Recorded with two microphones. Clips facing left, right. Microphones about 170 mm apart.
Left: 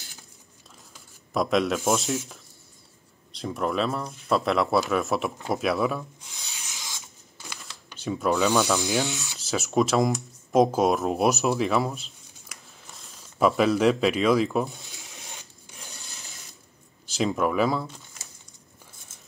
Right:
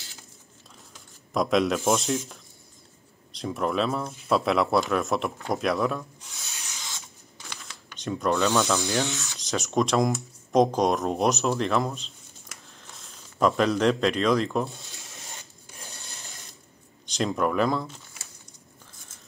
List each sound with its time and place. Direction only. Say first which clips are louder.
0.9 s speech: even; centre (ahead or behind)
7.3 s camera: left 1 dB; 5° left (ahead or behind)
9.0 s rub: even; 15° left (ahead or behind)
9.4 s speech: left 2 dB; 5° left (ahead or behind)
14.7 s a sound: even; 15° left (ahead or behind)
17.0 s speech: left 1 dB; 5° left (ahead or behind)